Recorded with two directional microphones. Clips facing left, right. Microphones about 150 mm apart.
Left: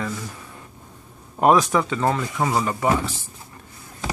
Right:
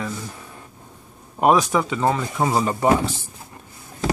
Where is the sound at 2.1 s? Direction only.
25° right (ahead or behind).